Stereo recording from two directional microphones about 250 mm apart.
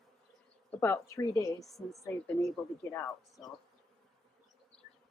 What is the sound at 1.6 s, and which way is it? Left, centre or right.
A woman's voice, centre.